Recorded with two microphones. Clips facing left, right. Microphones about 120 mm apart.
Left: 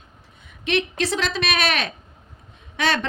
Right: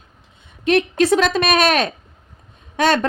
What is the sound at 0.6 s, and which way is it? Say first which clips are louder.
A woman's voice: right 7 dB; 45° right (ahead or behind).